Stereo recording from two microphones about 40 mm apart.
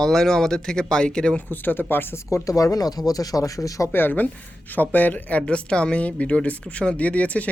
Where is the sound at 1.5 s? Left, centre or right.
Left.